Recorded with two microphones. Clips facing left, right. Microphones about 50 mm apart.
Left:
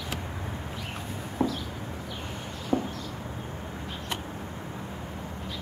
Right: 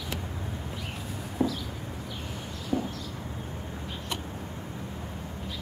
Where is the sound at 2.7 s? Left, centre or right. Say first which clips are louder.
Left 2 dB; centre.